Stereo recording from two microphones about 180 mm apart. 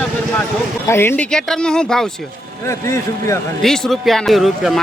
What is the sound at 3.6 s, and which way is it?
Speech, centre (ahead or behind).